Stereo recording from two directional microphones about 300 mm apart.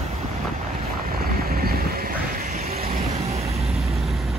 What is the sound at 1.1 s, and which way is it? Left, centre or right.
Vehicle, right.